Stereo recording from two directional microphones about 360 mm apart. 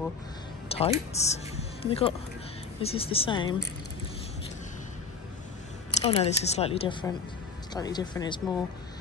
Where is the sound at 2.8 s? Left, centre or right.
Centre.